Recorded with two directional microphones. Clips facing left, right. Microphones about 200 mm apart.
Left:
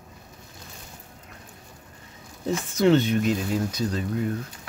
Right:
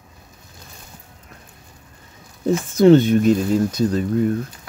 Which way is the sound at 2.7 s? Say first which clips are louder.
Right 8 dB; 45° right (ahead or behind).